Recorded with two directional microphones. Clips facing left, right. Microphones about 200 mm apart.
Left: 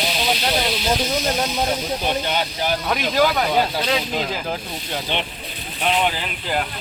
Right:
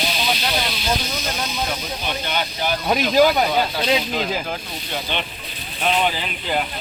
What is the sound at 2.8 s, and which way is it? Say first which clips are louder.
Speech: right 5 dB; 20° right (ahead or behind).